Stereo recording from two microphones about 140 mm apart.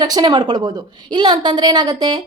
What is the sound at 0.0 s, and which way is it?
A woman's voice, 30° right (ahead or behind).